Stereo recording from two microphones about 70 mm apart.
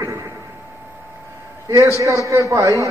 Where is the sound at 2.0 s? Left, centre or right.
Right.